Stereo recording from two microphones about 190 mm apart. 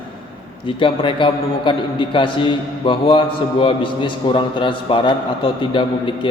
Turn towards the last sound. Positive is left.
turn(degrees=25)  # may be behind; listen again after turning